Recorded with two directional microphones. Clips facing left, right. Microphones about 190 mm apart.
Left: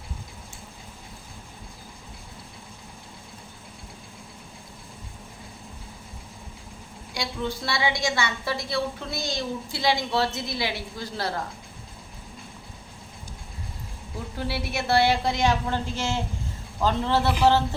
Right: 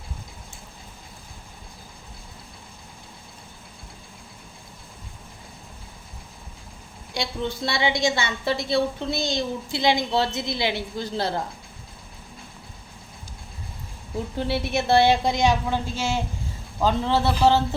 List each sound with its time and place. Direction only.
7.1 s a woman's voice: 25° right (ahead or behind)
14.3 s a woman's voice: 25° right (ahead or behind)
17.2 s speech: 15° left (ahead or behind)